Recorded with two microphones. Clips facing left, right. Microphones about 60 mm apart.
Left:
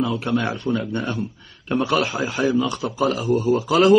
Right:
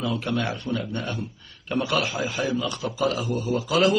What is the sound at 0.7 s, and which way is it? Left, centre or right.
Speech, left.